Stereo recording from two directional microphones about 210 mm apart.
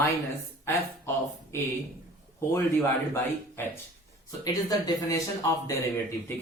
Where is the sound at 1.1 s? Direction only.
15° left (ahead or behind).